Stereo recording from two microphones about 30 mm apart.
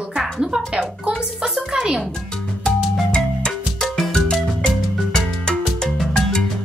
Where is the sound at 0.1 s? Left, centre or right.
Right.